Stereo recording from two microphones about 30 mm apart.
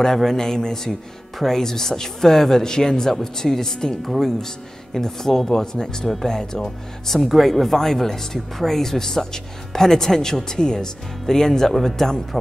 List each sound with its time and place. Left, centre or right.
0.0 s speech: centre
4.0 s speech: centre
4.9 s speech: centre